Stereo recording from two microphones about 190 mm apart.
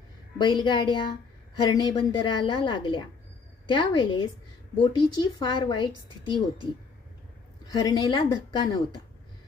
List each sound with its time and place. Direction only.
0.4 s a woman's voice: 25° left (ahead or behind)